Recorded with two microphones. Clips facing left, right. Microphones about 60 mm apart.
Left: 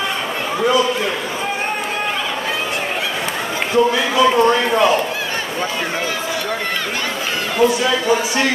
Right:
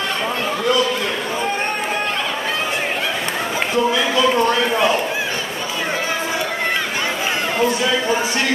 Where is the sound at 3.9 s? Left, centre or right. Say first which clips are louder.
Left 2 dB; centre.